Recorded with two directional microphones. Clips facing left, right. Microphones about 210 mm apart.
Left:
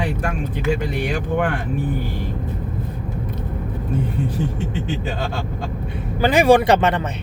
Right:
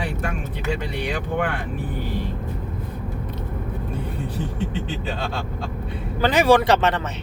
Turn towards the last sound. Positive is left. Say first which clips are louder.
# left 3 dB
turn(degrees=10)  # may be behind; listen again after turning